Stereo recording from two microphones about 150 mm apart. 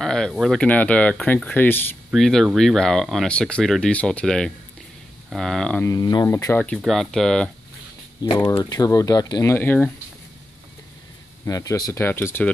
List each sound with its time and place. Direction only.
0.0 s speech: 5° left (ahead or behind)
2.0 s speech: centre (ahead or behind)
5.9 s speech: 25° left (ahead or behind)
6.8 s speech: centre (ahead or behind)
8.2 s speech: 25° left (ahead or behind)
11.4 s speech: 25° left (ahead or behind)